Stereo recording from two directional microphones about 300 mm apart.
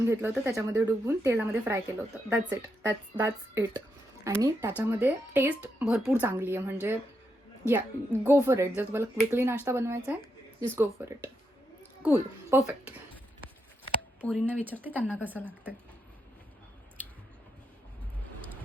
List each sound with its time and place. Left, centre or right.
0.0 s speech: centre
8.2 s speech: centre
14.2 s speech: centre